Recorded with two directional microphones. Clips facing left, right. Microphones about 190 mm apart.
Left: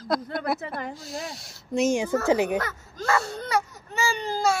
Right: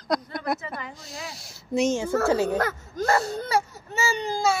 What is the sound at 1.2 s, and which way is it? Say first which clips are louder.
Speech: left 1 dB; centre (ahead or behind).